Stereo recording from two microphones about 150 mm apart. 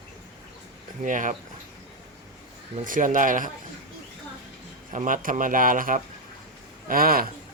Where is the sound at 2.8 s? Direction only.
65° right (ahead or behind).